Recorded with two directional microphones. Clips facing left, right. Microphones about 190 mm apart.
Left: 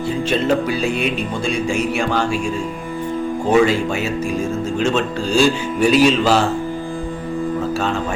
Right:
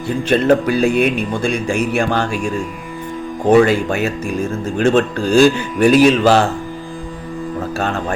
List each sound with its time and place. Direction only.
0.3 s speech: 55° right (ahead or behind)
3.6 s speech: 55° right (ahead or behind)
7.8 s speech: 55° right (ahead or behind)